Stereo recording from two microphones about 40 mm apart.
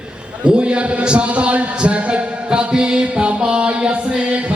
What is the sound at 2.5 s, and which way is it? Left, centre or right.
Music, right.